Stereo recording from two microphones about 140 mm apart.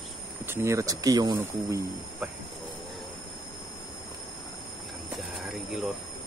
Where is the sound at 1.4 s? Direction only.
15° right (ahead or behind).